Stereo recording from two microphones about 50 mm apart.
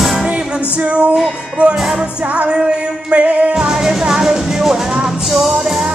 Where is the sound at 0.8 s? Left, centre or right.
Right.